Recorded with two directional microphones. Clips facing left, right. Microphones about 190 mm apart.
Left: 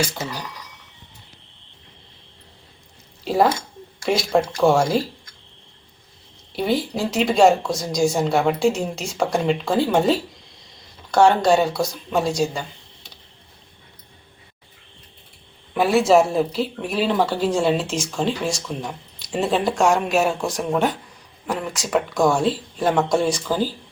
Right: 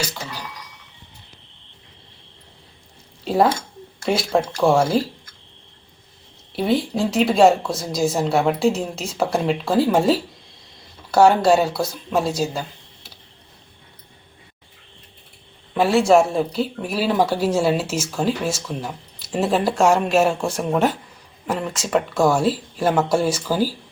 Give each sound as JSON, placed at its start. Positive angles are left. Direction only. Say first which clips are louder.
{"t": 3.2, "sound": "speech", "louder": "right 1 dB", "side_deg": 0}
{"t": 6.6, "sound": "speech", "louder": "right 2 dB", "side_deg": 0}
{"t": 15.7, "sound": "a man's voice", "louder": "right 1 dB", "side_deg": 15}
{"t": 16.0, "sound": "speech", "louder": "even", "side_deg": 0}